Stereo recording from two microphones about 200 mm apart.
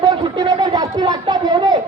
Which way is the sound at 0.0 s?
20° right (ahead or behind).